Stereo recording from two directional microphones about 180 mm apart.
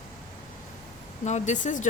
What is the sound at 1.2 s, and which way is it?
Speech, 40° left (ahead or behind).